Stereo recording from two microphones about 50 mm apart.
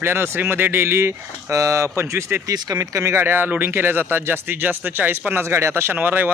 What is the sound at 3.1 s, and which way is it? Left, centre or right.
Speech, right.